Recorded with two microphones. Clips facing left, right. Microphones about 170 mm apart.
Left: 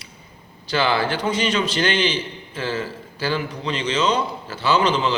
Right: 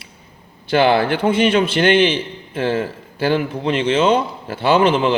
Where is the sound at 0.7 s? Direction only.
55° right (ahead or behind).